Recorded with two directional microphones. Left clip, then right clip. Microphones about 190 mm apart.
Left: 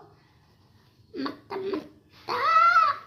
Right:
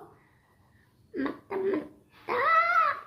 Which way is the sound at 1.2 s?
20° left (ahead or behind).